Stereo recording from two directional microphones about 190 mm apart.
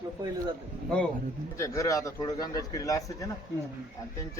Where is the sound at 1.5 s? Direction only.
15° left (ahead or behind).